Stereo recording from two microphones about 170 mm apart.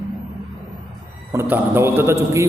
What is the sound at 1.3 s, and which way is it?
A man's voice, 15° right (ahead or behind).